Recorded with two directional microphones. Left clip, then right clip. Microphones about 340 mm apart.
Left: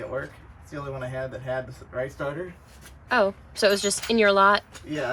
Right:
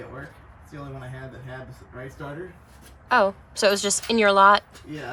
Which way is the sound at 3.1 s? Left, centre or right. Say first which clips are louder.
Right 2 dB; centre.